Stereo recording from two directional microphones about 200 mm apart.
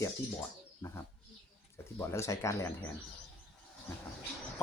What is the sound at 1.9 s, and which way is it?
Speech, 15° left (ahead or behind).